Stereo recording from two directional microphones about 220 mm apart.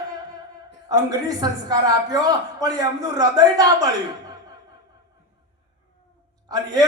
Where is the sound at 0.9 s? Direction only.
15° right (ahead or behind).